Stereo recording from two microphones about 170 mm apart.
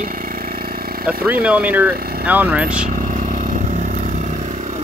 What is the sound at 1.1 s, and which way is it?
Speech, 10° right (ahead or behind).